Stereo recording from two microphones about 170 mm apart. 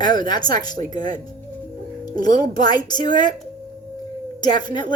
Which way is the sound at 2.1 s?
25° left (ahead or behind).